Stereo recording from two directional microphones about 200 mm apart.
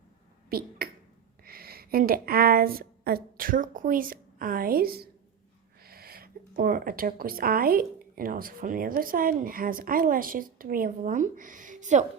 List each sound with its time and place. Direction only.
0.5 s a woman's voice: 50° right (ahead or behind)